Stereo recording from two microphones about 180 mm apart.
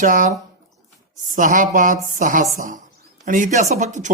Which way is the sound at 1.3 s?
45° right (ahead or behind).